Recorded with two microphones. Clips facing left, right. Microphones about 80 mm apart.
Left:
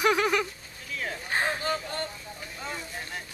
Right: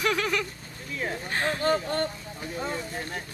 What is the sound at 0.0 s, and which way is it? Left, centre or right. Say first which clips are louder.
Speech: left 3 dB; centre.